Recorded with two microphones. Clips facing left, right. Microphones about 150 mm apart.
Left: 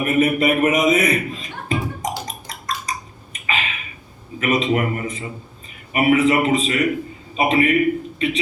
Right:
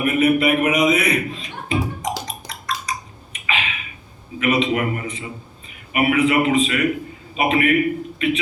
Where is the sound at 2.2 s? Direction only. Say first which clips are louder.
Even; 45° left (ahead or behind).